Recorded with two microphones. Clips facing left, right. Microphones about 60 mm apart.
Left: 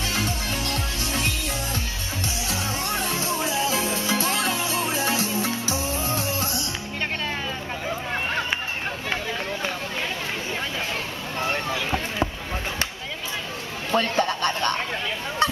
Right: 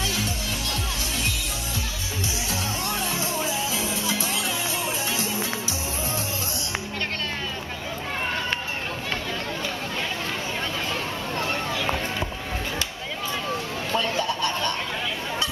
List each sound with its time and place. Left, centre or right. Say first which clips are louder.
3.7 s music: left 3 dB; left
11.4 s run: left 2 dB; left
13.9 s a sound: left 3 dB; left